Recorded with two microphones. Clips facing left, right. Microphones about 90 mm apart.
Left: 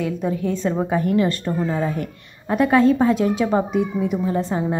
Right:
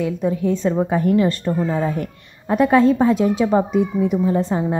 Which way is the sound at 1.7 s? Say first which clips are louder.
Right 2 dB; 20° right (ahead or behind).